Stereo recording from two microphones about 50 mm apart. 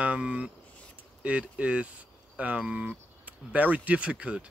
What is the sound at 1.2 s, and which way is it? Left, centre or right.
Speech, right.